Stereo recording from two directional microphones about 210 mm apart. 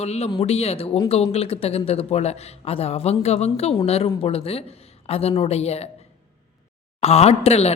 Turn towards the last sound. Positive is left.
turn(degrees=30)  # may be behind; listen again after turning